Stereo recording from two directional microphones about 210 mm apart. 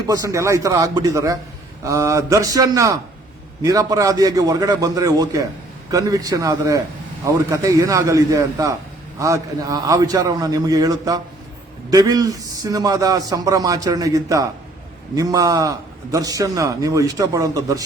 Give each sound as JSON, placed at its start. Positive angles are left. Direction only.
{"t": 0.1, "sound": "a man's voice", "side_deg": -15}